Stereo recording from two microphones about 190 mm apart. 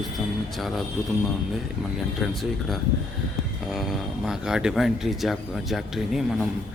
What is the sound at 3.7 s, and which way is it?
Speech, centre (ahead or behind).